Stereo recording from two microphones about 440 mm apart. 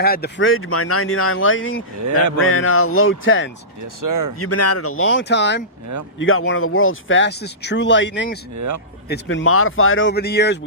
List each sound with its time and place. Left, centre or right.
0.0 s speech: left
4.0 s speech: right
4.4 s speech: left
8.5 s speech: right
9.0 s speech: left